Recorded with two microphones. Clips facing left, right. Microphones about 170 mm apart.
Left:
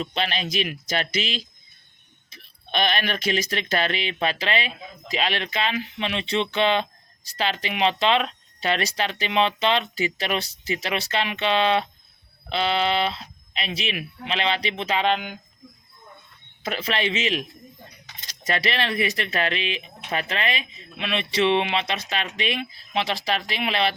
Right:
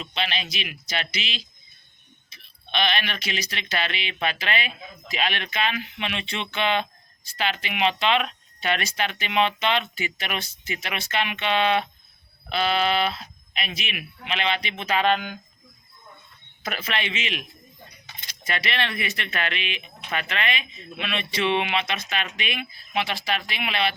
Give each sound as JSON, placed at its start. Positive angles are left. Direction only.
{"t": 0.0, "sound": "speech", "side_deg": 45}
{"t": 16.6, "sound": "speech", "side_deg": 30}